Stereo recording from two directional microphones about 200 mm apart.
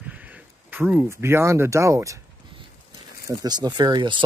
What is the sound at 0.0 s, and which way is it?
Speech, 5° right (ahead or behind).